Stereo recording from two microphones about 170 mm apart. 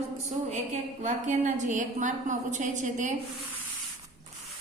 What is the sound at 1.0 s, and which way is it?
A woman's voice, 45° right (ahead or behind).